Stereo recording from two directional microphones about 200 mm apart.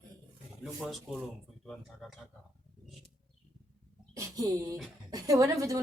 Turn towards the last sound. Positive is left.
turn(degrees=-15)  # may be behind; listen again after turning